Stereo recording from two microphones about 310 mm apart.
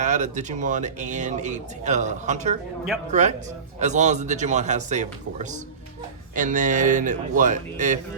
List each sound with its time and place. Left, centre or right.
0.0 s speech: right